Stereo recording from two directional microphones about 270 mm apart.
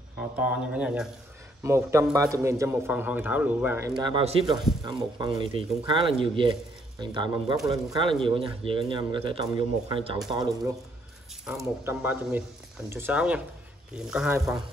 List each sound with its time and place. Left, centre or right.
0.2 s a man's voice: centre